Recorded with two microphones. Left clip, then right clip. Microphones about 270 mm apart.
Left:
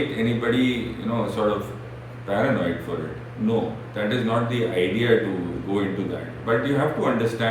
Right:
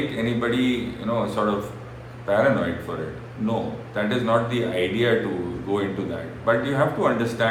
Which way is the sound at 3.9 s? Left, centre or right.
Centre.